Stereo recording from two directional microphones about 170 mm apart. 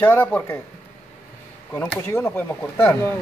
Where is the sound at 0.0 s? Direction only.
10° left (ahead or behind).